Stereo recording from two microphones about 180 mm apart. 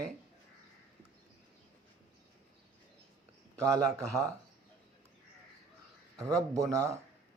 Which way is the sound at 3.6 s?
15° right (ahead or behind).